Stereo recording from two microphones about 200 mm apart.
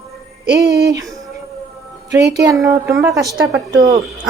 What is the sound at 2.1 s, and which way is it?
Speech, 15° right (ahead or behind).